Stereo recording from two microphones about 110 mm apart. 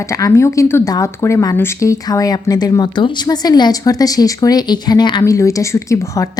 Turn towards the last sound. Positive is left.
turn(degrees=30)  # may be behind; listen again after turning